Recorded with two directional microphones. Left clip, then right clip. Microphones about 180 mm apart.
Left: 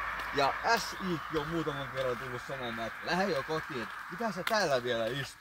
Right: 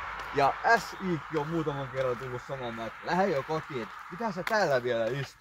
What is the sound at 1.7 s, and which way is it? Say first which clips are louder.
Speech: right 3 dB; 45° right (ahead or behind).